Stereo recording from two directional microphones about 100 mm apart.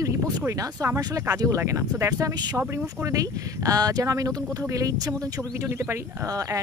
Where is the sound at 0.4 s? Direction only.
30° right (ahead or behind).